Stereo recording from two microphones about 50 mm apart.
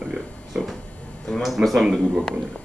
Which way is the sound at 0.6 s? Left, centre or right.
Right.